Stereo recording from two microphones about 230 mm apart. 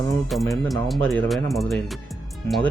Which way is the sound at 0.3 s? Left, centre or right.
Centre.